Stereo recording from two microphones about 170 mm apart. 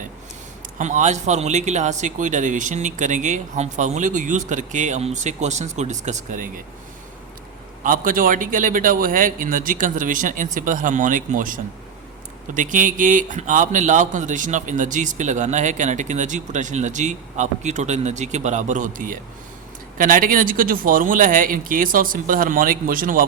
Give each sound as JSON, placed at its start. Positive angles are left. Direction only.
{"t": 0.8, "sound": "a man's voice", "side_deg": -45}
{"t": 7.9, "sound": "a man's voice", "side_deg": -55}